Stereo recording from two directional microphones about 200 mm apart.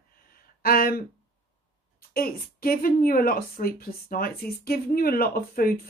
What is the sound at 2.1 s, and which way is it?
A woman's voice, 45° left (ahead or behind).